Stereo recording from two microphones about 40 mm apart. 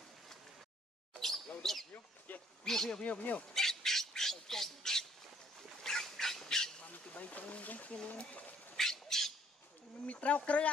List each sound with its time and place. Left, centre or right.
1.6 s a sound: centre
2.3 s speech: left
2.6 s speech: centre
3.0 s speech: left
3.5 s squawk: centre
6.9 s speech: left
8.7 s bird: centre
10.0 s speech: left